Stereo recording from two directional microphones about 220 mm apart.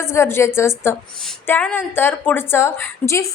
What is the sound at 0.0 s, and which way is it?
A woman's voice, 10° left (ahead or behind).